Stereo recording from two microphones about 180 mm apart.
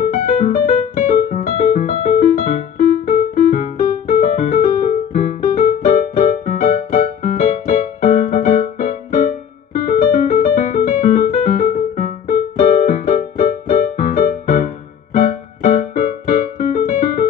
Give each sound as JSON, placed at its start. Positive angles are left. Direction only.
{"t": 0.1, "sound": "music", "side_deg": 50}
{"t": 9.8, "sound": "piano", "side_deg": 45}
{"t": 12.3, "sound": "music", "side_deg": 45}